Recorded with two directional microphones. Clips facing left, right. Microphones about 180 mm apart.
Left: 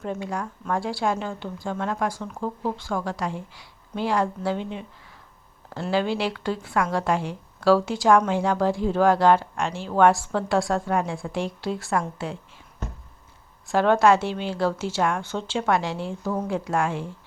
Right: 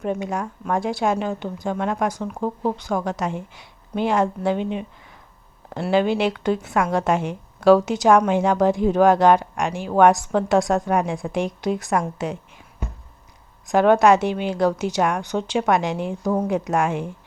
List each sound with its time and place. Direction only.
0.0 s a woman's voice: 15° right (ahead or behind)